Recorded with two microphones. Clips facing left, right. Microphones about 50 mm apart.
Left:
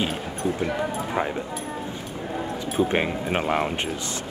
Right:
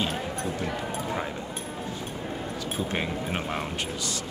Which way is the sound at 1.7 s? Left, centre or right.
Left.